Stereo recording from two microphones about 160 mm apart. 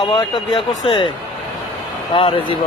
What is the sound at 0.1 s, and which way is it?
Speech, 30° left (ahead or behind).